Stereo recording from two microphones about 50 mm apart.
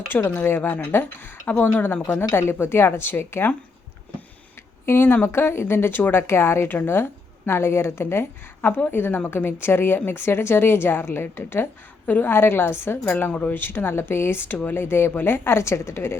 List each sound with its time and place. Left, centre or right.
0.3 s speech: left
0.6 s a woman's voice: left
2.1 s speech: left
4.9 s a woman's voice: left